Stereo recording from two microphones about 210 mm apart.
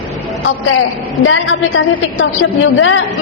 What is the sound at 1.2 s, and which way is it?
A woman's voice, 65° left (ahead or behind).